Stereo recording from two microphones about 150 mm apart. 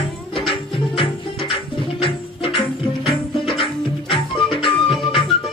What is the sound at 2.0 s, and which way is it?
Music, 35° left (ahead or behind).